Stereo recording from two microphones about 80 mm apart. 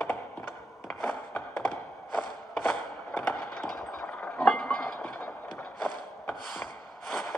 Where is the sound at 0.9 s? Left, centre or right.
Centre.